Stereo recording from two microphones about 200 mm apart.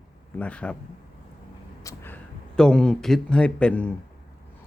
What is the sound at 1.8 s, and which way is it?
Speech, 10° left (ahead or behind).